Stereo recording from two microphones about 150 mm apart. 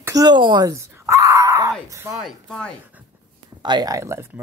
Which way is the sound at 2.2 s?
5° left (ahead or behind).